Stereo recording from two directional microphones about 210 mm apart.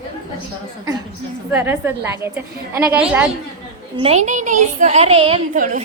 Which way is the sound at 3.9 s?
30° right (ahead or behind).